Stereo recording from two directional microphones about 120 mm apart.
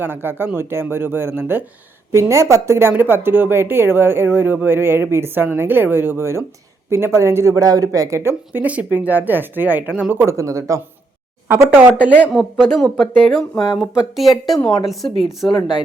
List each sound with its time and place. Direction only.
0.0 s speech: 20° right (ahead or behind)
12.5 s speech: centre (ahead or behind)
15.4 s speech: 40° left (ahead or behind)